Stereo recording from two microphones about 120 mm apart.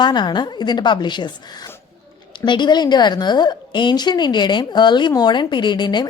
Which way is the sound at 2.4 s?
40° left (ahead or behind).